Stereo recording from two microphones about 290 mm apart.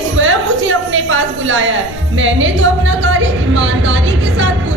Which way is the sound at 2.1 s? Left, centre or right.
Right.